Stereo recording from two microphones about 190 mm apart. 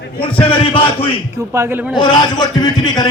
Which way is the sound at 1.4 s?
15° right (ahead or behind).